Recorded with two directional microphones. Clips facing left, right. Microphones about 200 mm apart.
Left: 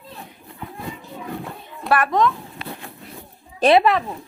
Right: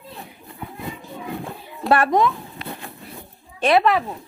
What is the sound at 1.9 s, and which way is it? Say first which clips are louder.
Speech: right 2 dB; 25° right (ahead or behind).